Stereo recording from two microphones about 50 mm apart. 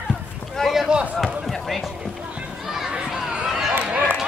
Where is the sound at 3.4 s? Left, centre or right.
Centre.